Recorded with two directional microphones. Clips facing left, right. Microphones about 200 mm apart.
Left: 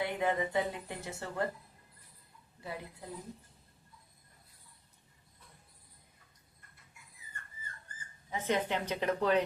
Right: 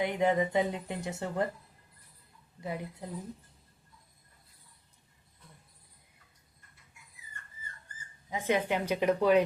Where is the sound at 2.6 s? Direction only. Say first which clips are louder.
Right 5 dB; 20° right (ahead or behind).